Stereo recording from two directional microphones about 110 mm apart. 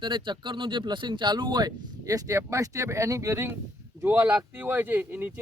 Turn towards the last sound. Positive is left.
turn(degrees=-15)  # may be behind; listen again after turning